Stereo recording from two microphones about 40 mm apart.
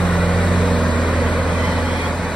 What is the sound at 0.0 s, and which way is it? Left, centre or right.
Vehicle, left.